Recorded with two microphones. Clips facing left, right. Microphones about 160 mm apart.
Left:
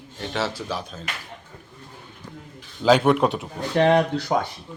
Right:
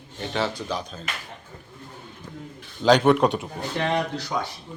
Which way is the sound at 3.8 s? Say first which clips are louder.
Left 8 dB; 60° left (ahead or behind).